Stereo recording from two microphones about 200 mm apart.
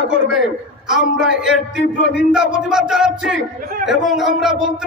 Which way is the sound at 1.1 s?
5° right (ahead or behind).